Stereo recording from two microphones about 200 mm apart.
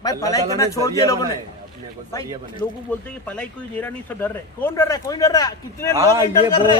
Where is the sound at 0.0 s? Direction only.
15° left (ahead or behind).